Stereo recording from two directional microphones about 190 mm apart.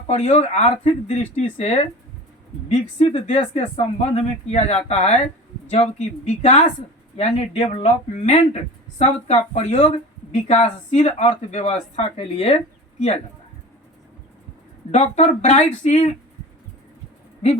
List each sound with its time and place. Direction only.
0.1 s speech: 35° left (ahead or behind)
14.9 s speech: 35° left (ahead or behind)